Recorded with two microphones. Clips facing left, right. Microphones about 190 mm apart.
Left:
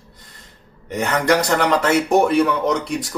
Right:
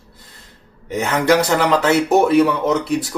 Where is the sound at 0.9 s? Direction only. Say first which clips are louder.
Right 2 dB; 5° right (ahead or behind).